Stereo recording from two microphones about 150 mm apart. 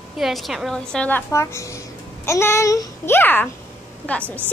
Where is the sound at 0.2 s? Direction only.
Centre (ahead or behind).